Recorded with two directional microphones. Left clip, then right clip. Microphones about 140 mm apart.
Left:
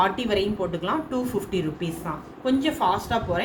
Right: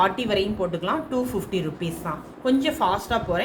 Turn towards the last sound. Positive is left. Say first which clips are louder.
# right 1 dB
turn(degrees=-40)  # may be behind; listen again after turning